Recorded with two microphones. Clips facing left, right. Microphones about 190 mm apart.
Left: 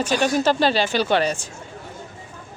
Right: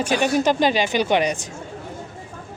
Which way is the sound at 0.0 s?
10° right (ahead or behind).